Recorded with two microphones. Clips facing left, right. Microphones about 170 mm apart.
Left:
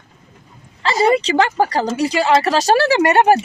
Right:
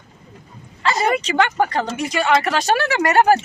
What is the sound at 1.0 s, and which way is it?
Speech, 30° left (ahead or behind).